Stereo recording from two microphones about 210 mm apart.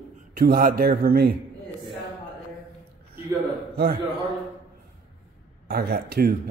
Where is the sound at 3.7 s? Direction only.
45° right (ahead or behind).